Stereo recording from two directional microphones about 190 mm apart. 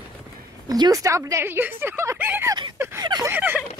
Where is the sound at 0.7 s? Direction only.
20° right (ahead or behind).